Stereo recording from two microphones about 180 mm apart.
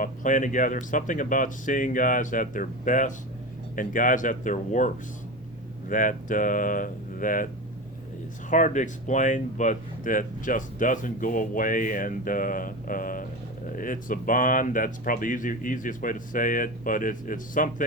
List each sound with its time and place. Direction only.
0.0 s speech: 45° left (ahead or behind)
5.9 s speech: 45° left (ahead or behind)
8.4 s speech: 45° left (ahead or behind)